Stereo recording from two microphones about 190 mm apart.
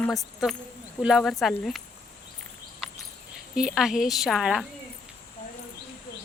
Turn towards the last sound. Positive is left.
turn(degrees=0)  # may be behind; listen again after turning